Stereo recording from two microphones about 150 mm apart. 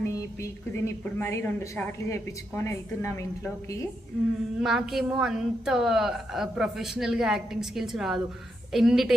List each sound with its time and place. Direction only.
0.0 s music: 20° left (ahead or behind)
0.9 s speech: 15° left (ahead or behind)
4.6 s a woman's voice: centre (ahead or behind)